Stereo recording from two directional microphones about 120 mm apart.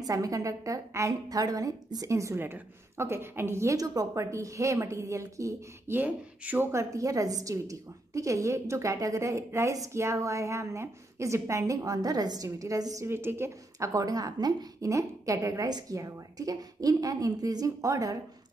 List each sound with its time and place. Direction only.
0.0 s a woman's voice: 30° right (ahead or behind)